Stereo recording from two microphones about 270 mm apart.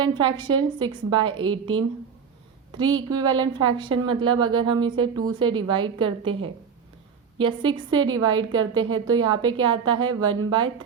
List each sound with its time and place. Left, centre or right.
0.0 s a woman's voice: centre